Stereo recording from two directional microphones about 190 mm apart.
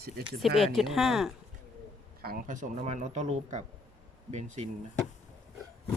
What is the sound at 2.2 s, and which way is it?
Speech, 45° right (ahead or behind).